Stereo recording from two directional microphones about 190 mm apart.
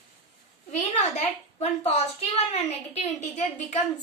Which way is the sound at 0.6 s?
35° left (ahead or behind).